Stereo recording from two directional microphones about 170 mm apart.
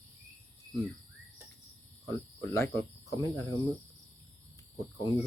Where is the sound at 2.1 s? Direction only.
15° left (ahead or behind).